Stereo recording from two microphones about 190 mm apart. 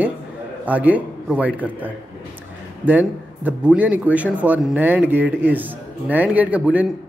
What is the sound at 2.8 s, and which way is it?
Speech, 10° right (ahead or behind).